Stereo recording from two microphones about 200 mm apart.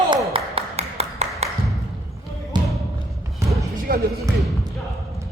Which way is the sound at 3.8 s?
50° right (ahead or behind).